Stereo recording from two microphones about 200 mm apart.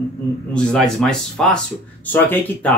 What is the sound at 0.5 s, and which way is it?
Speech, 5° left (ahead or behind).